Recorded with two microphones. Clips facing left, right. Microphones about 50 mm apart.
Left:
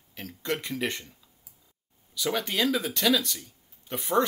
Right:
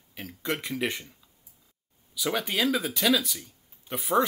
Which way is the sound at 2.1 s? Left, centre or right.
Centre.